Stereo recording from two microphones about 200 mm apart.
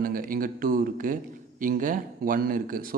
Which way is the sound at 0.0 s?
45° right (ahead or behind).